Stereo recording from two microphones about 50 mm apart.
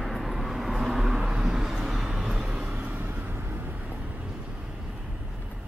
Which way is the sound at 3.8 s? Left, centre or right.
Right.